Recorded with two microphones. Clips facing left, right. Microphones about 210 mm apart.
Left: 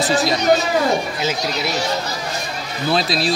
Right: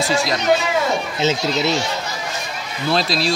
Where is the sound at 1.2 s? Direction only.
25° right (ahead or behind).